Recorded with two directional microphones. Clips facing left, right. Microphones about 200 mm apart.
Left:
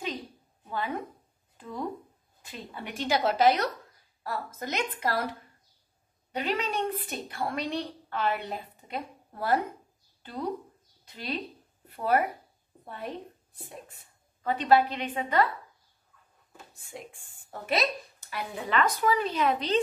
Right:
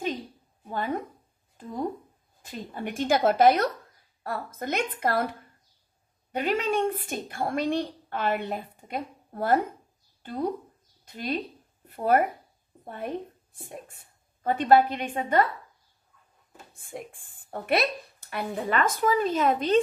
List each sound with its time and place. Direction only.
0.7 s a woman's voice: 45° right (ahead or behind)
6.3 s a woman's voice: 50° right (ahead or behind)
16.7 s a woman's voice: 55° right (ahead or behind)